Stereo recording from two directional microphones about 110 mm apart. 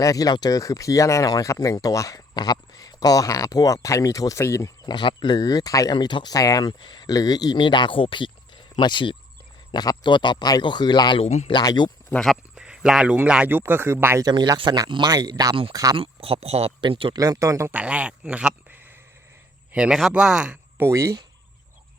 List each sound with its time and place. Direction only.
0.0 s speech: 35° left (ahead or behind)
4.9 s speech: 45° left (ahead or behind)
11.2 s a man's voice: 90° left
11.6 s speech: 40° left (ahead or behind)
12.2 s speech: 5° right (ahead or behind); by 14.3 s 25° right (ahead or behind)
14.3 s speech: 35° right (ahead or behind)
16.0 s speech: 60° right (ahead or behind)
16.8 s speech: 50° right (ahead or behind)
17.2 s speech: 30° right (ahead or behind)
17.7 s speech: 10° right (ahead or behind)
20.7 s speech: 25° right (ahead or behind)